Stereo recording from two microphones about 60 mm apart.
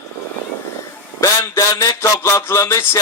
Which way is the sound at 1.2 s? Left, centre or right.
Left.